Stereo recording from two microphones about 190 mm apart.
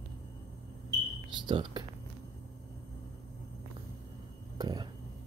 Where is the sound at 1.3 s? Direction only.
25° right (ahead or behind).